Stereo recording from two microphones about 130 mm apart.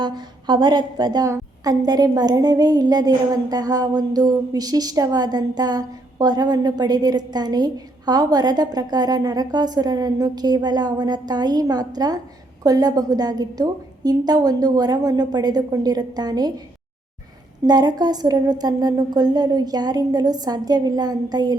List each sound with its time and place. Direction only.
0.0 s a woman's voice: 35° right (ahead or behind)
17.7 s a woman's voice: 30° right (ahead or behind)